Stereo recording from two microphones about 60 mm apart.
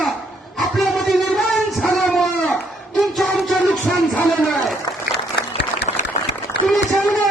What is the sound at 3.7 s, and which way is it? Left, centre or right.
Music, centre.